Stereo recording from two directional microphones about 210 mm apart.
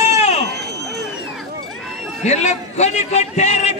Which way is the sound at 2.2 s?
35° left (ahead or behind).